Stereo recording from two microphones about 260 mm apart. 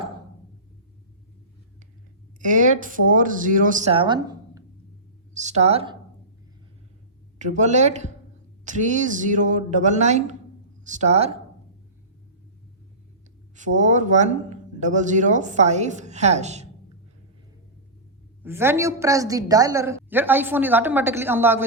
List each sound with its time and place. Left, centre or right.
2.4 s speech: right
5.3 s speech: right
7.3 s speech: right
13.6 s speech: right
18.4 s a woman's voice: centre